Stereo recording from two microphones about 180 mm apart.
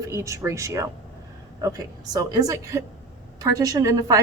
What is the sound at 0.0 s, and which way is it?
A woman's voice, 15° right (ahead or behind).